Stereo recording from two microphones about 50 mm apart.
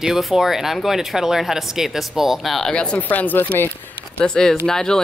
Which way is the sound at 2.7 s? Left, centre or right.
Left.